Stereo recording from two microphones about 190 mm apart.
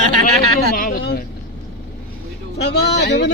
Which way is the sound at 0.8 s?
50° left (ahead or behind).